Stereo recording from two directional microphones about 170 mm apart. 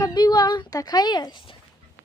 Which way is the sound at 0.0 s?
25° left (ahead or behind).